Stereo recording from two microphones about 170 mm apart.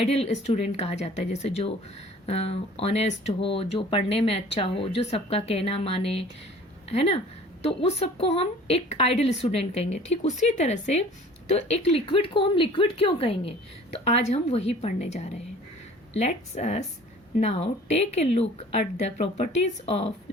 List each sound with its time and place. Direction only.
0.0 s a woman's voice: 35° left (ahead or behind)